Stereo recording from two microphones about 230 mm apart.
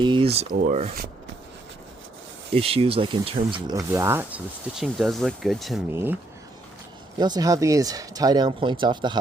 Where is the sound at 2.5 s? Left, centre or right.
Right; by 5.8 s centre.